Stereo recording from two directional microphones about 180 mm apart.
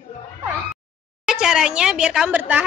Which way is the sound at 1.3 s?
5° right (ahead or behind).